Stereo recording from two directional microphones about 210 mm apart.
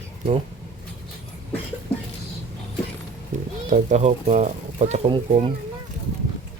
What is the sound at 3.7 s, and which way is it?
Speech, 35° right (ahead or behind).